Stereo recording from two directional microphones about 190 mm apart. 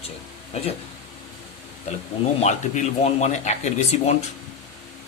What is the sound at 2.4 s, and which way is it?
Speech, 35° left (ahead or behind).